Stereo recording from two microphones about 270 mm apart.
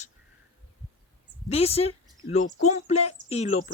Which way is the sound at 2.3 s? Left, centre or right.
Left.